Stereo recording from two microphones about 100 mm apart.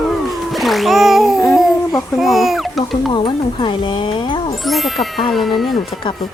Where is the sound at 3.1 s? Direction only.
55° left (ahead or behind).